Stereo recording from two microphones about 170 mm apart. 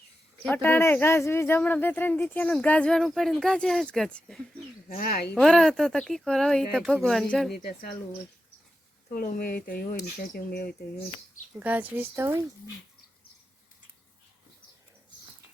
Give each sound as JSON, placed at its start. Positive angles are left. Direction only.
{"t": 0.4, "sound": "speech", "side_deg": 10}
{"t": 4.9, "sound": "speech", "side_deg": 60}
{"t": 5.3, "sound": "speech", "side_deg": 5}
{"t": 7.5, "sound": "speech", "side_deg": 60}
{"t": 9.0, "sound": "speech", "side_deg": 60}
{"t": 11.6, "sound": "speech", "side_deg": -10}